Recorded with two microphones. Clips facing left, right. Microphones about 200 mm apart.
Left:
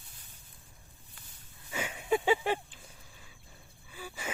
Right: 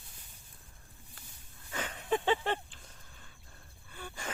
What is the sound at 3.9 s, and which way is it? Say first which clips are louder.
Gasp: left 1 dB; 5° left (ahead or behind).